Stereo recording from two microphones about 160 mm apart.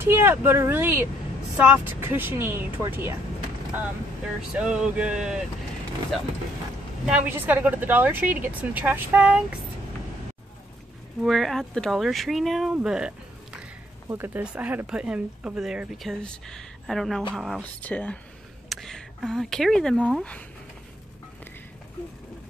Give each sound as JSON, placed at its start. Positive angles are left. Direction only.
{"t": 0.0, "sound": "a woman's voice", "side_deg": -15}
{"t": 4.6, "sound": "a woman's voice", "side_deg": -5}
{"t": 7.1, "sound": "a woman's voice", "side_deg": -10}
{"t": 11.2, "sound": "speech", "side_deg": 0}
{"t": 12.7, "sound": "a sound", "side_deg": -5}
{"t": 14.0, "sound": "speech", "side_deg": -15}